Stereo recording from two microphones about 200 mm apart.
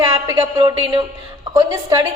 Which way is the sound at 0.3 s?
20° right (ahead or behind).